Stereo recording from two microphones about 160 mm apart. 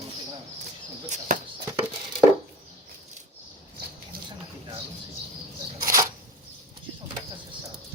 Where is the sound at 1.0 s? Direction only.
50° right (ahead or behind).